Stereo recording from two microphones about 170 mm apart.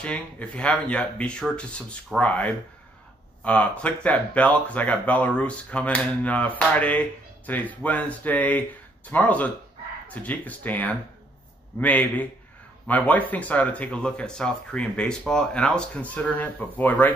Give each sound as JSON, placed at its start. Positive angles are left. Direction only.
{"t": 0.0, "sound": "speech", "side_deg": 5}